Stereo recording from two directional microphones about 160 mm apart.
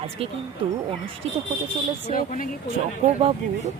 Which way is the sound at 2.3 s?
60° left (ahead or behind).